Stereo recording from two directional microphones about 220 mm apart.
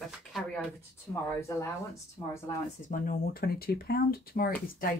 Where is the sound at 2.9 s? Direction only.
40° left (ahead or behind).